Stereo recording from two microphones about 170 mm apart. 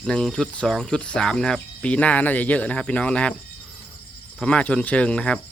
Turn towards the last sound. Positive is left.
turn(degrees=5)  # may be behind; listen again after turning